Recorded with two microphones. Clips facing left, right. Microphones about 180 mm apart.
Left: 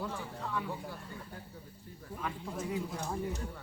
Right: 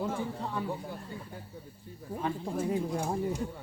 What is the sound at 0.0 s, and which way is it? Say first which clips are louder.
Speech: right 6 dB; 30° right (ahead or behind).